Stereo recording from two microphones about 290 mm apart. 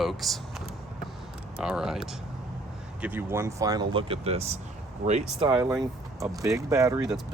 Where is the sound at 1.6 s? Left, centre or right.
Centre.